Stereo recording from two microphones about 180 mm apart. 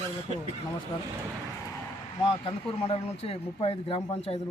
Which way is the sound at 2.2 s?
30° left (ahead or behind).